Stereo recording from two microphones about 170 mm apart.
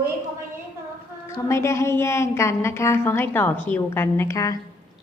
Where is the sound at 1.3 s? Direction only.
20° left (ahead or behind).